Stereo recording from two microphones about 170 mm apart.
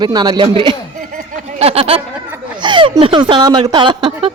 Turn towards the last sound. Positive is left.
turn(degrees=-30)  # may be behind; listen again after turning